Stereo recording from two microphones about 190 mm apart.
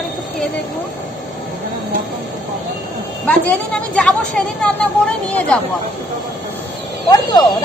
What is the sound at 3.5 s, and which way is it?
Speech, 5° left (ahead or behind).